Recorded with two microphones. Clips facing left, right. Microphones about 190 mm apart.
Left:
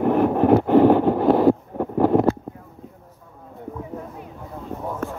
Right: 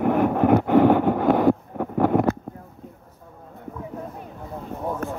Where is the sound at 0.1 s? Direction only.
30° left (ahead or behind).